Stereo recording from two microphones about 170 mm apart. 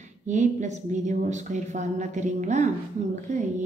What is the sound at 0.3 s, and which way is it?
A woman's voice, 45° right (ahead or behind).